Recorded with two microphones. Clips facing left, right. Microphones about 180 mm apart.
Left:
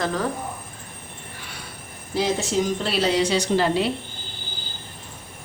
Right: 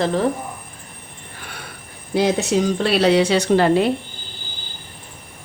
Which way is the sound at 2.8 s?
65° right (ahead or behind).